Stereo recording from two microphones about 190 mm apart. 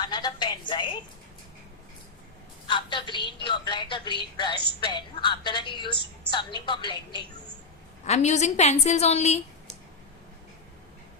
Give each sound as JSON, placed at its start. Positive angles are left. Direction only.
{"t": 0.0, "sound": "a sound", "side_deg": 25}
{"t": 2.6, "sound": "a woman's voice", "side_deg": 25}
{"t": 8.0, "sound": "a woman's voice", "side_deg": 35}